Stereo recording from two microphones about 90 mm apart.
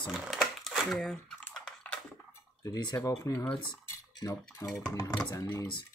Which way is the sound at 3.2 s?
35° left (ahead or behind).